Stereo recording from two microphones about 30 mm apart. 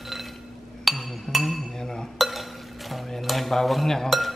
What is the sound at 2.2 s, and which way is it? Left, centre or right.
Stir, centre.